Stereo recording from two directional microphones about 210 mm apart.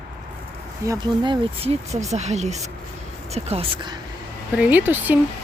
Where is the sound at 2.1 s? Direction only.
30° right (ahead or behind).